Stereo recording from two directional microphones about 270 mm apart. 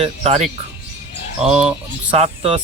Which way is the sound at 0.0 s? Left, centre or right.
Right.